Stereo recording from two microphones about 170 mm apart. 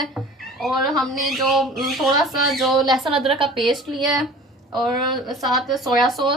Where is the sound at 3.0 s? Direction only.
30° right (ahead or behind).